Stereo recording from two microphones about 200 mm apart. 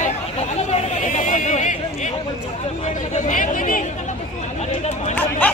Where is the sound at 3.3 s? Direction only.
40° left (ahead or behind).